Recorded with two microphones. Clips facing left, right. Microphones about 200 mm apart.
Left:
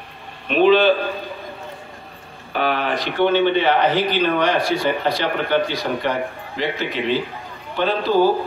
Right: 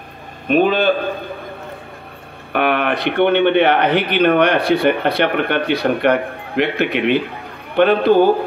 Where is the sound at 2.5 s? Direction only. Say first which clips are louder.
Right 4 dB; 60° right (ahead or behind).